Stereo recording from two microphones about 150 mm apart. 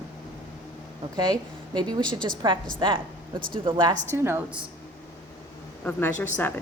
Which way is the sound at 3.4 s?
70° right (ahead or behind).